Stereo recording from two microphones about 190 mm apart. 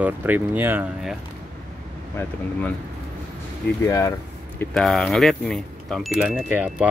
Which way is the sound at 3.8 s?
15° left (ahead or behind).